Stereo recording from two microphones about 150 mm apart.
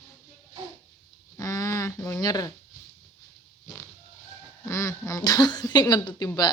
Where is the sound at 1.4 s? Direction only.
20° left (ahead or behind).